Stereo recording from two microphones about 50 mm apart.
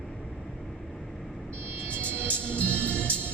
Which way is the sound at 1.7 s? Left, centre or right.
Right.